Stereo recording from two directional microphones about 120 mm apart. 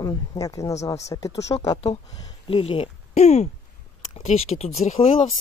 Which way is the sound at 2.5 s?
50° left (ahead or behind).